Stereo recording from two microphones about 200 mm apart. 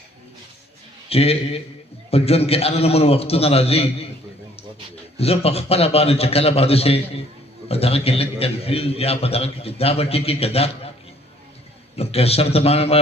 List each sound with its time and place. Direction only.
1.1 s a man's voice: 30° left (ahead or behind)
5.1 s a man's voice: 30° left (ahead or behind)
11.9 s a man's voice: 30° left (ahead or behind)